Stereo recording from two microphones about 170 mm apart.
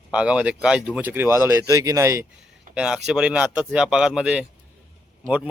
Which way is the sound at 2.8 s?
5° right (ahead or behind).